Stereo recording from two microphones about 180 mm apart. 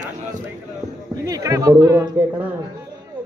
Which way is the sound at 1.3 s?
20° right (ahead or behind).